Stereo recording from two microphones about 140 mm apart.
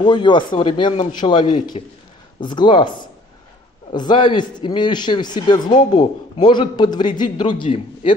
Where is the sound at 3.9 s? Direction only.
35° left (ahead or behind).